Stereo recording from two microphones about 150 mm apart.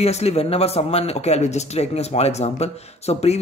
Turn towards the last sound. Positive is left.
turn(degrees=45)  # may be behind; listen again after turning